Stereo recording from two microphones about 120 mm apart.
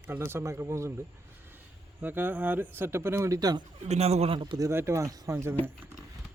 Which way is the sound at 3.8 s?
60° right (ahead or behind).